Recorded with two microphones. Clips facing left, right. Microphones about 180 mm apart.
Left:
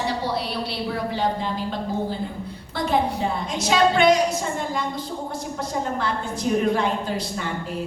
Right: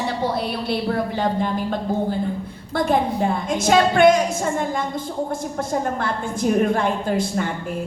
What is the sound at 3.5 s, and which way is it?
A woman's voice, 50° right (ahead or behind).